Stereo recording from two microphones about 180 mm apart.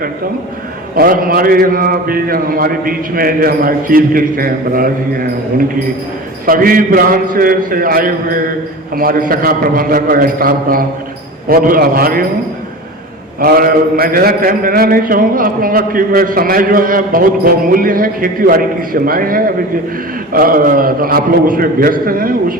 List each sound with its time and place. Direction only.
0.9 s a man's voice: 55° right (ahead or behind)
6.4 s a man's voice: 50° right (ahead or behind)
13.4 s a man's voice: 55° right (ahead or behind)